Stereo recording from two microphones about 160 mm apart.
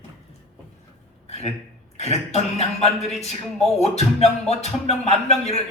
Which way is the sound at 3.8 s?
40° left (ahead or behind).